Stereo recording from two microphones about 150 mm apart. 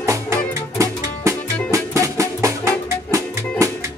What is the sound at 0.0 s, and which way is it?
Music, 20° right (ahead or behind).